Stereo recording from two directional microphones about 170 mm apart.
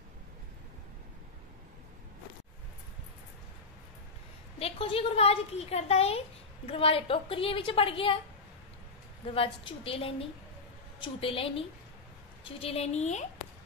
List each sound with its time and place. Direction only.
4.6 s a woman's voice: 35° left (ahead or behind)
9.3 s a woman's voice: 35° left (ahead or behind)